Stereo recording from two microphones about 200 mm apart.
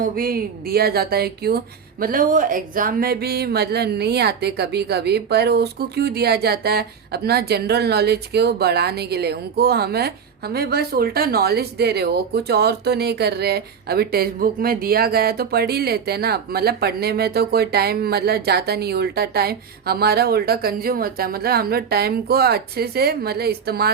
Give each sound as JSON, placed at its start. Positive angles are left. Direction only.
{"t": 0.0, "sound": "speech", "side_deg": -45}